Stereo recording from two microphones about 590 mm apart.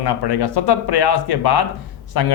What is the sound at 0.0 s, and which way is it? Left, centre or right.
A man's voice, left.